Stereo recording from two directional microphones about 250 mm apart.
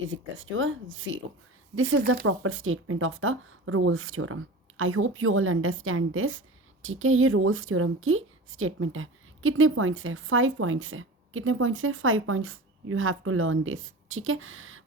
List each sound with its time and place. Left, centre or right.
0.1 s speech: right